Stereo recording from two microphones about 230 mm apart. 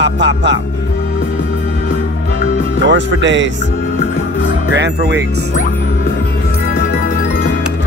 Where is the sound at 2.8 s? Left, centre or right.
Right.